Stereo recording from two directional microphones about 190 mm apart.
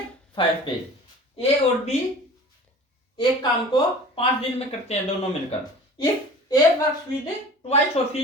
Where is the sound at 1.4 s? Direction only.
35° left (ahead or behind).